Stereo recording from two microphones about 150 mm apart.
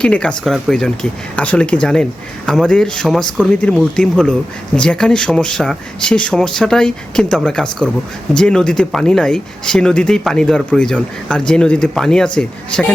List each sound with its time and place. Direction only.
0.0 s speech: 5° left (ahead or behind)